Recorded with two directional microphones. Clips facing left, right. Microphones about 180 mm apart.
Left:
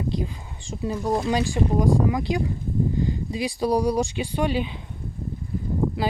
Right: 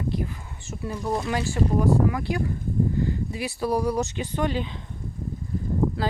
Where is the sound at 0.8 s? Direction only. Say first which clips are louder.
Left 3 dB; 20° left (ahead or behind).